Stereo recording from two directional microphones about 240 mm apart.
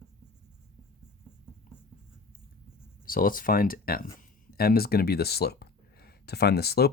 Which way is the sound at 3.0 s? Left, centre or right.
Left.